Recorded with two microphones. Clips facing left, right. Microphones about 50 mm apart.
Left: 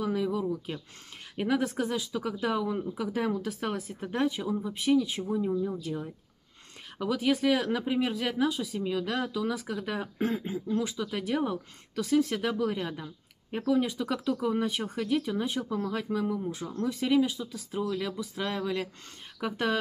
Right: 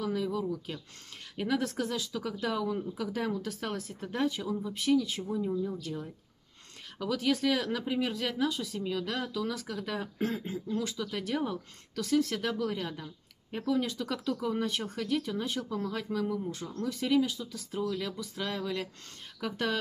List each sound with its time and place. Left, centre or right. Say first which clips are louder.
0.0 s speech: left 3 dB; centre